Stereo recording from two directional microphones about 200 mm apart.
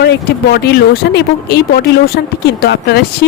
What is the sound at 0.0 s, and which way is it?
Speech, 50° left (ahead or behind).